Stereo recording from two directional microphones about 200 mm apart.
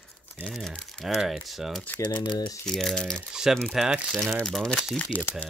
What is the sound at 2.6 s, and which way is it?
Speech, centre (ahead or behind).